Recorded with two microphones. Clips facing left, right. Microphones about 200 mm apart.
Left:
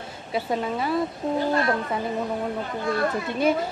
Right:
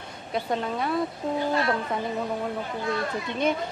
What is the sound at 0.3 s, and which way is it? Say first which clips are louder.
Speech: left 2 dB; 5° left (ahead or behind).